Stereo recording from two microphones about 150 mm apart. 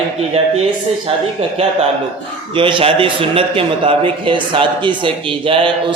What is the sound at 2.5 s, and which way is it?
A man's voice, 35° right (ahead or behind).